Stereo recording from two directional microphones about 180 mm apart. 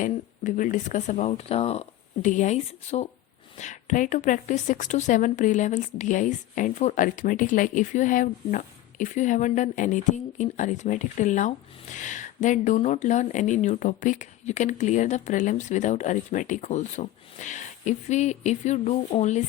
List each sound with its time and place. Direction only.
0.0 s speech: 45° left (ahead or behind)